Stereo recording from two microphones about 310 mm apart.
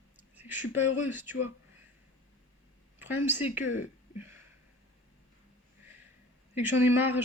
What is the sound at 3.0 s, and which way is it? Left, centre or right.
Speech, centre.